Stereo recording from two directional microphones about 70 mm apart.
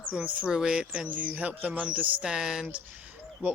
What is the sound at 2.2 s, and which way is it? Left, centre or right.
Speech, centre.